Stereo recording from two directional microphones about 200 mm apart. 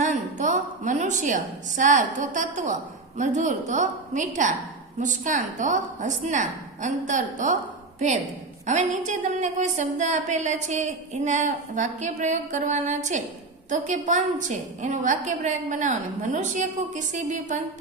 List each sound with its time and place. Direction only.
0.0 s a woman's voice: 35° right (ahead or behind)